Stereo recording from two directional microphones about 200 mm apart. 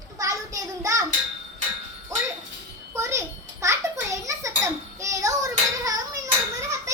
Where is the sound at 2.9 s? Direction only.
15° right (ahead or behind).